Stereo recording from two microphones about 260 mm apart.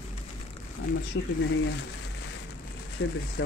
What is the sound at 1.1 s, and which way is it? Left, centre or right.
Speech, left.